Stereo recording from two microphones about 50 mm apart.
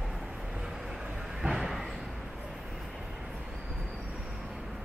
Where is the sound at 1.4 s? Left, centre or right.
Centre.